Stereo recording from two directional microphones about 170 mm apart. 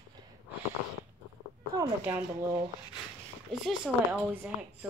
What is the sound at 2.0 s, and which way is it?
Speech, 15° right (ahead or behind).